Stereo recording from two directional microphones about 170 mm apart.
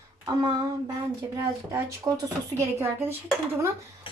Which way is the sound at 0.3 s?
25° right (ahead or behind).